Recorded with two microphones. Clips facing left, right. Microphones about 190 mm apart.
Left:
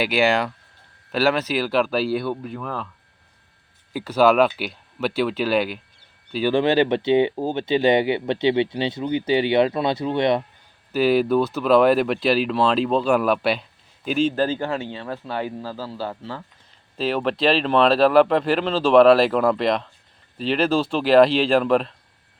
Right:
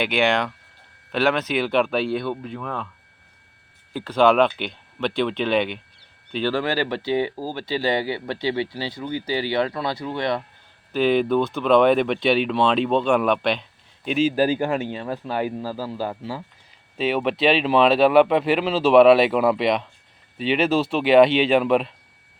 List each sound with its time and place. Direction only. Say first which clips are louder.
0.0 s speech: left 1 dB; 5° left (ahead or behind)
3.9 s speech: left 1 dB; 10° left (ahead or behind)
6.5 s speech: left 7 dB; 20° left (ahead or behind)
10.9 s speech: left 1 dB; 5° left (ahead or behind); by 16.4 s 15° right (ahead or behind)
17.0 s speech: even; 5° right (ahead or behind)